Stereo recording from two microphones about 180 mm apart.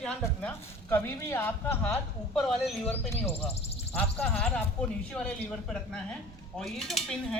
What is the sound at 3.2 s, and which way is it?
Speech, 35° left (ahead or behind).